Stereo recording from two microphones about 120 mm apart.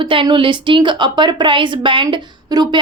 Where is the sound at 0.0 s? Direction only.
45° right (ahead or behind).